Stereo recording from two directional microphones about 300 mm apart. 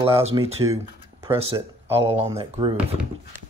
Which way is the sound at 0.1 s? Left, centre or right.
Centre.